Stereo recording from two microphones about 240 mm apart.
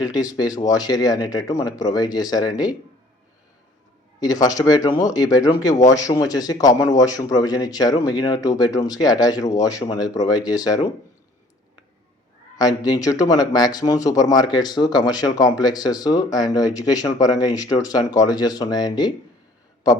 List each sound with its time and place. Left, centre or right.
0.3 s speech: centre
4.2 s speech: centre
12.5 s speech: centre